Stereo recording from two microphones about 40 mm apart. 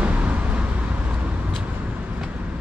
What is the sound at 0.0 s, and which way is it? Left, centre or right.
Vehicle, right.